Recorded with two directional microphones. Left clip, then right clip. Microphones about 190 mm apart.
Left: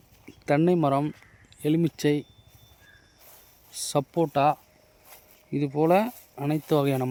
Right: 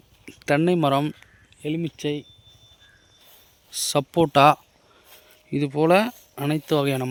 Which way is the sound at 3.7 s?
Centre (ahead or behind).